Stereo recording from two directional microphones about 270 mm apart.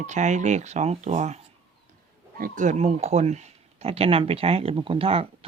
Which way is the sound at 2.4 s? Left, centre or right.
Right.